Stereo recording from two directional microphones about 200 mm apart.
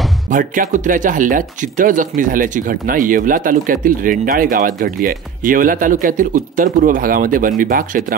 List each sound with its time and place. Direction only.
0.3 s speech: 40° right (ahead or behind)